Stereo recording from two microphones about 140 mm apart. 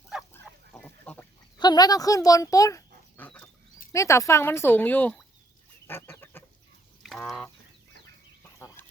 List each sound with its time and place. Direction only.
0.1 s goose: 5° right (ahead or behind)
0.8 s duck: 10° left (ahead or behind)
1.5 s a child's voice: 30° left (ahead or behind)
3.2 s dog: 10° left (ahead or behind)
3.9 s speech: 20° left (ahead or behind)
5.9 s goose: 15° left (ahead or behind)
7.0 s a sound: centre (ahead or behind)
8.5 s a sound: 20° left (ahead or behind)